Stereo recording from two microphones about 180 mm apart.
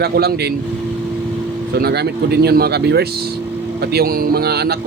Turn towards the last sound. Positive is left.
turn(degrees=-60)  # may be behind; listen again after turning